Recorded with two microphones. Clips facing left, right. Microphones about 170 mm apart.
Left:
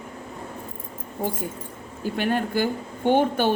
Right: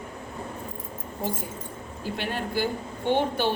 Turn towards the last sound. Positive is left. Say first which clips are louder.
# left 4 dB
turn(degrees=50)  # may be behind; listen again after turning